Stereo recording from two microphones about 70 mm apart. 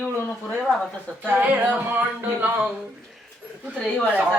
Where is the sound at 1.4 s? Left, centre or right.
Right.